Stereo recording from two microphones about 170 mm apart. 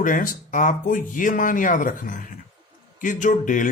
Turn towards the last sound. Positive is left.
turn(degrees=50)  # may be behind; listen again after turning